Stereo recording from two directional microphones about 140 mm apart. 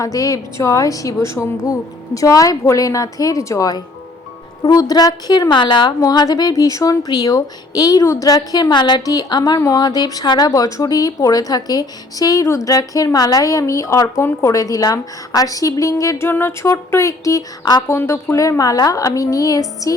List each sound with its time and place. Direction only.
0.0 s a woman's voice: 25° left (ahead or behind)